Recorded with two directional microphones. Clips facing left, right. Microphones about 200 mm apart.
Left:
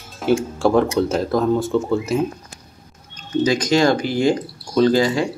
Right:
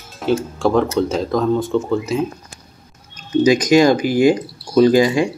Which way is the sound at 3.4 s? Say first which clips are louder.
Right 4 dB; 15° right (ahead or behind).